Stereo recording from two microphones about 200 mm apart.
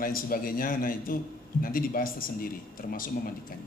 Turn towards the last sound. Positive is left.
turn(degrees=45)  # may be behind; listen again after turning